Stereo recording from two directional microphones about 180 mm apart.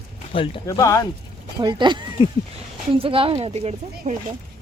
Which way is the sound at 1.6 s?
25° right (ahead or behind).